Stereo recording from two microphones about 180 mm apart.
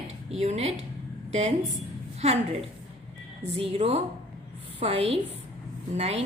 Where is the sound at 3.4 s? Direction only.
30° right (ahead or behind).